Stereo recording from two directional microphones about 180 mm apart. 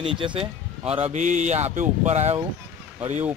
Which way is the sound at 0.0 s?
30° right (ahead or behind).